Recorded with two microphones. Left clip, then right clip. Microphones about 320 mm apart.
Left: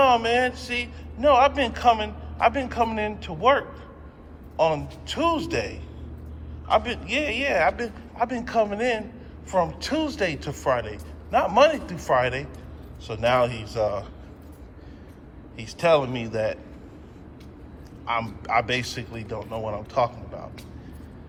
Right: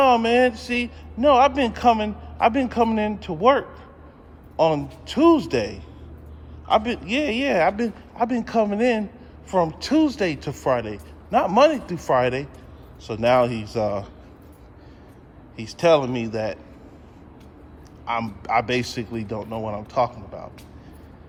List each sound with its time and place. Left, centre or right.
0.0 s a man's voice: right
15.5 s speech: centre
15.8 s a man's voice: right
18.0 s a man's voice: right